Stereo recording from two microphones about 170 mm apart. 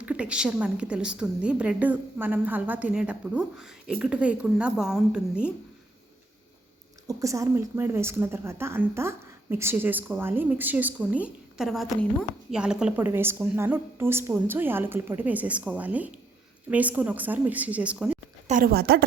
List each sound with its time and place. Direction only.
0.0 s a woman's voice: 10° right (ahead or behind)
7.1 s a woman's voice: 20° right (ahead or behind)
18.4 s speech: 55° right (ahead or behind)